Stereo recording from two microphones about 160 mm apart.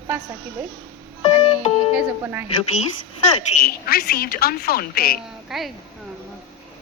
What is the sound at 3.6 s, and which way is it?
Speech, 70° left (ahead or behind).